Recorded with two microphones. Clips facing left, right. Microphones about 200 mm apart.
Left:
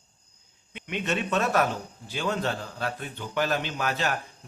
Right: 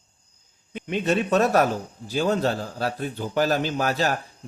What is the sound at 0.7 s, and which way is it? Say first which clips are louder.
A man's voice: right 6 dB; 35° right (ahead or behind).